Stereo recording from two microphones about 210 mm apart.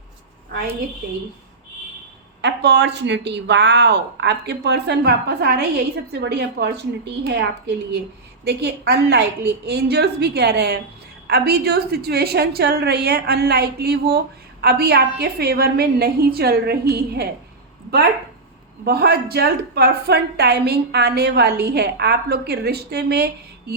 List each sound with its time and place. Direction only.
2.4 s a woman's voice: 55° right (ahead or behind)
8.4 s a woman's voice: 50° right (ahead or behind)
18.9 s a woman's voice: 50° right (ahead or behind)